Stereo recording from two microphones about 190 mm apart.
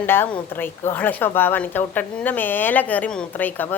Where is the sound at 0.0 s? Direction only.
10° left (ahead or behind).